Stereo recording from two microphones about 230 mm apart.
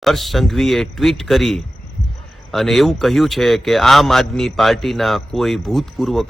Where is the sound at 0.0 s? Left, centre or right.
Centre.